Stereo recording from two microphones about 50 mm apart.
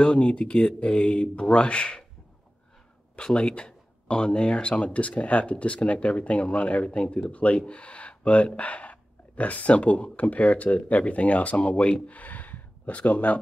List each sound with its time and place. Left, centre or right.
0.0 s speech: left
3.2 s speech: centre